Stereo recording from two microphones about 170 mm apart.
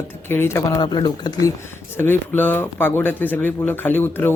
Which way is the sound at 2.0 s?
10° left (ahead or behind).